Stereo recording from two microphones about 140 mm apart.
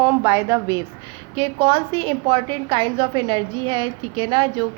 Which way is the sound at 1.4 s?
45° right (ahead or behind).